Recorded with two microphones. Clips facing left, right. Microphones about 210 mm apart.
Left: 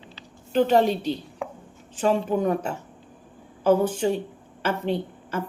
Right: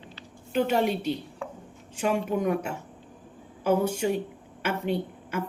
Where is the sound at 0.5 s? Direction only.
35° left (ahead or behind).